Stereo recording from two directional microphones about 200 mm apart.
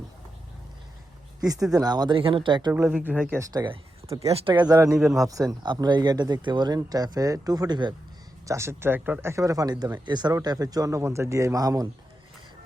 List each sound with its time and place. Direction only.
1.7 s speech: 20° right (ahead or behind)
2.7 s speech: 10° right (ahead or behind)
4.9 s speech: centre (ahead or behind)
5.3 s speech: 15° right (ahead or behind)